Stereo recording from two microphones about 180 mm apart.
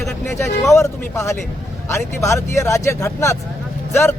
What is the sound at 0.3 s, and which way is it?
Speech, 15° left (ahead or behind).